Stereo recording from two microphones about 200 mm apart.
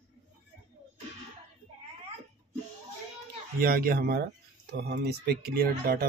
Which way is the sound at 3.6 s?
45° right (ahead or behind).